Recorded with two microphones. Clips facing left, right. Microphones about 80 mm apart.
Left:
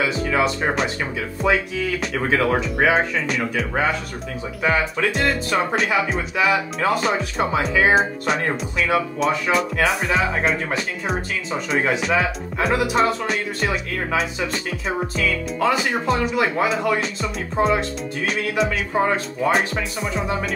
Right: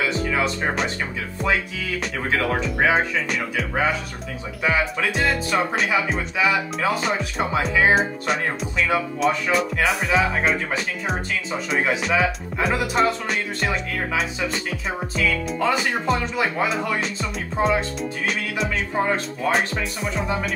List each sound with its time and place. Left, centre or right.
0.0 s speech: centre
2.1 s speech: centre